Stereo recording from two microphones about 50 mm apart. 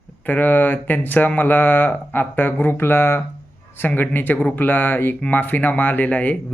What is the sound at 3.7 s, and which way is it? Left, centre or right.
Speech, left.